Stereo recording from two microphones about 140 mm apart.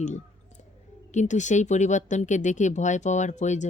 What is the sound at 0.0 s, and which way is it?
Clicking, 60° left (ahead or behind).